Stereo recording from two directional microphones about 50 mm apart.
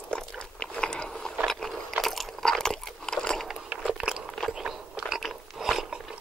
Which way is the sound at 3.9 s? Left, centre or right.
Centre.